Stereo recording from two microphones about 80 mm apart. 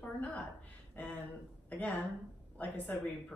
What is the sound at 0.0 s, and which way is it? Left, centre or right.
Speech, centre.